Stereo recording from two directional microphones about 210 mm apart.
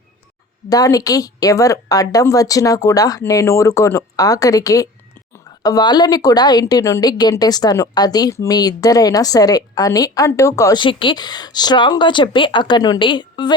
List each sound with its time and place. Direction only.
0.7 s a woman's voice: 15° left (ahead or behind)